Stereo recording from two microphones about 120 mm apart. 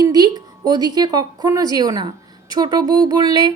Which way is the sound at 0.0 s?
35° right (ahead or behind).